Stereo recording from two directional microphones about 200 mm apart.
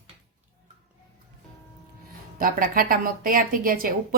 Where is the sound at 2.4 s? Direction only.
45° right (ahead or behind).